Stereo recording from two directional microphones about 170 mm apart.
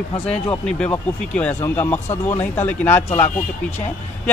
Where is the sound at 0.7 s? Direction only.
5° left (ahead or behind).